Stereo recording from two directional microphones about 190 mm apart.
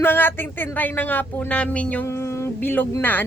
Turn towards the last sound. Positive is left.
turn(degrees=10)  # may be behind; listen again after turning